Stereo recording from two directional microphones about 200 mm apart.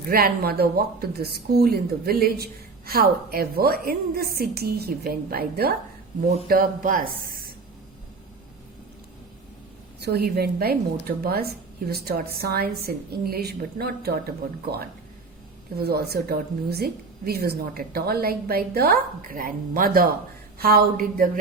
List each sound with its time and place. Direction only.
0.1 s speech: 50° right (ahead or behind)
10.0 s speech: 50° right (ahead or behind)